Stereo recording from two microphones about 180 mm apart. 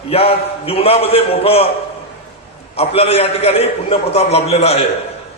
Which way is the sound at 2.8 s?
35° left (ahead or behind).